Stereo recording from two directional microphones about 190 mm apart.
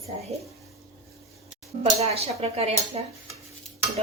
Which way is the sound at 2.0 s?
30° right (ahead or behind).